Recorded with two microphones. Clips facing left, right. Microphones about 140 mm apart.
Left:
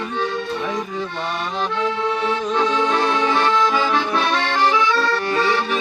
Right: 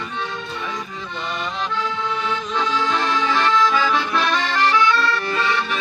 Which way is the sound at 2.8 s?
20° left (ahead or behind).